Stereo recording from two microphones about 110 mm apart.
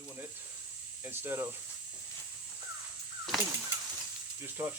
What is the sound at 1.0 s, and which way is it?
Speech, 20° right (ahead or behind).